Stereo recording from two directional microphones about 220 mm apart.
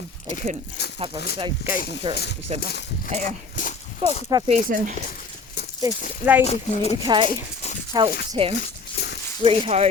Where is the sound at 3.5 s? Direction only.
35° left (ahead or behind).